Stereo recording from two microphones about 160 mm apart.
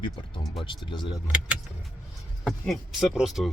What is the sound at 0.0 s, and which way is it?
Speech, 30° left (ahead or behind).